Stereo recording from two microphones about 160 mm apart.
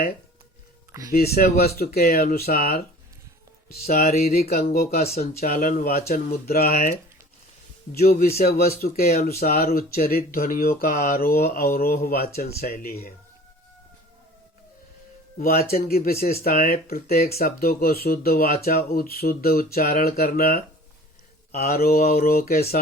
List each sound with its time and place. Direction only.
1.1 s speech: 75° left (ahead or behind)
7.9 s speech: 65° left (ahead or behind)
15.4 s speech: 70° left (ahead or behind)